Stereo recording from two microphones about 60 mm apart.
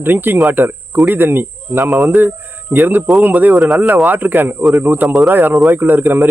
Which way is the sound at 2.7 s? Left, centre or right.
Right.